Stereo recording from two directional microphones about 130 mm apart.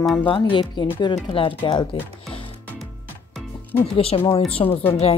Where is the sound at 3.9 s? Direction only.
45° left (ahead or behind).